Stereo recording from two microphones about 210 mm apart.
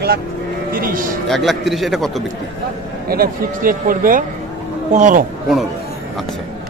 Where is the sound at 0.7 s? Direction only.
40° right (ahead or behind).